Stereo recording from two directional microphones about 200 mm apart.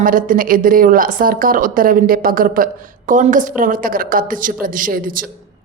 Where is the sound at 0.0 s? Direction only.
45° right (ahead or behind).